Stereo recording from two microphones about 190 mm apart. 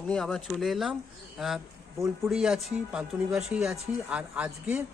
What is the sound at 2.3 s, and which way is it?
Speech, centre (ahead or behind).